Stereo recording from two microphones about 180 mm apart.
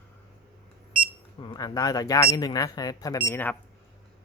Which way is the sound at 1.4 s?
25° left (ahead or behind).